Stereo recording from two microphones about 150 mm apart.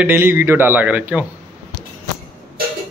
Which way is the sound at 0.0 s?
15° right (ahead or behind).